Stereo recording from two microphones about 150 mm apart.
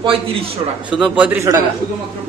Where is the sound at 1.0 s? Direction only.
10° right (ahead or behind).